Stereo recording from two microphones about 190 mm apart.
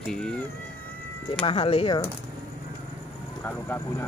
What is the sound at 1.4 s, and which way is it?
Speech, 30° left (ahead or behind).